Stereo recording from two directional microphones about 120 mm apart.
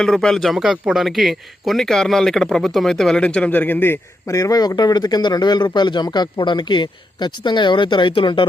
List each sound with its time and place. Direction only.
0.0 s a man's voice: 5° left (ahead or behind); by 8.4 s 45° left (ahead or behind)